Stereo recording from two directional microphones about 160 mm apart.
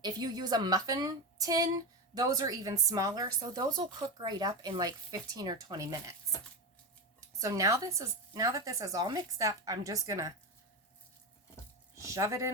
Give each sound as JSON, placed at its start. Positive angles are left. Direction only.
{"t": 0.0, "sound": "speech", "side_deg": -25}
{"t": 7.2, "sound": "speech", "side_deg": -20}
{"t": 11.9, "sound": "speech", "side_deg": -20}